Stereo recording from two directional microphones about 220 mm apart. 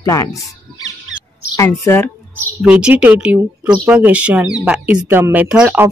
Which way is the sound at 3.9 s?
5° right (ahead or behind).